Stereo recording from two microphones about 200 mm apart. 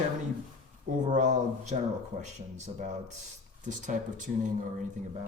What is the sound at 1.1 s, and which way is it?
Speech, 40° right (ahead or behind).